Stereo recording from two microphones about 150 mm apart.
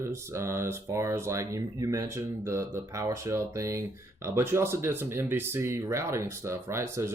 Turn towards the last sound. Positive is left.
turn(degrees=-15)  # may be behind; listen again after turning